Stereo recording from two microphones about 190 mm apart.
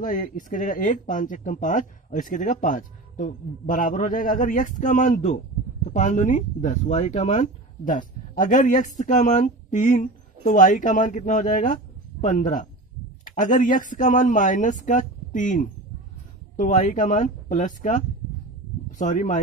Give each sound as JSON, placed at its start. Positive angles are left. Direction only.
{"t": 0.0, "sound": "speech", "side_deg": 45}